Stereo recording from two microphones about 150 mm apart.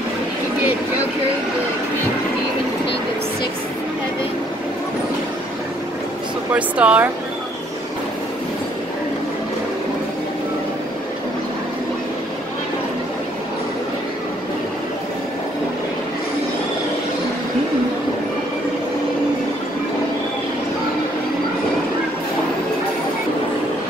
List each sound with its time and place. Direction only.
6.5 s speech: 10° right (ahead or behind)